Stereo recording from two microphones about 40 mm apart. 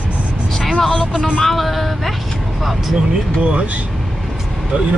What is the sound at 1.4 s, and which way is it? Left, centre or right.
Speech, centre.